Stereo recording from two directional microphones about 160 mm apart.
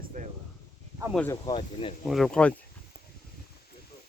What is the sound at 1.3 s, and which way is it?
Speech, 30° left (ahead or behind).